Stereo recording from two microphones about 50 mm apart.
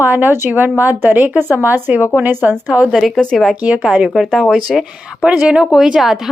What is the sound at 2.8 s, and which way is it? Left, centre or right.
Speech, centre.